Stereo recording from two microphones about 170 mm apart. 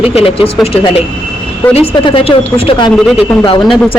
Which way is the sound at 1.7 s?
35° left (ahead or behind).